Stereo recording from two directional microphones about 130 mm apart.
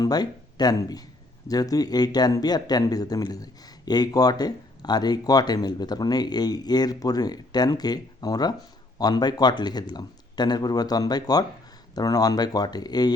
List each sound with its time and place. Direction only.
0.0 s speech: 30° left (ahead or behind)